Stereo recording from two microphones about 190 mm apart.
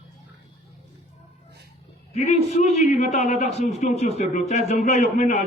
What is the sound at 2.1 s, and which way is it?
A man's voice, 35° left (ahead or behind).